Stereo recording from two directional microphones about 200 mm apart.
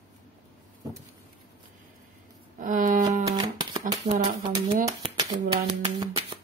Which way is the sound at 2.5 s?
40° right (ahead or behind).